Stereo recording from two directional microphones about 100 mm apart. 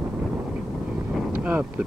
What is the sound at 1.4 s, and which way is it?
Wind noise, 20° right (ahead or behind).